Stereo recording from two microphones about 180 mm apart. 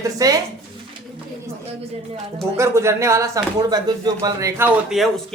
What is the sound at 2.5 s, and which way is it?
Speech, 15° right (ahead or behind).